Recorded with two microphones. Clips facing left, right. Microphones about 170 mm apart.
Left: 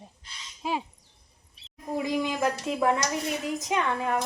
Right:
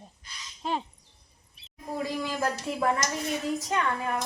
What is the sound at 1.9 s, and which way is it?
A woman's voice, 15° left (ahead or behind).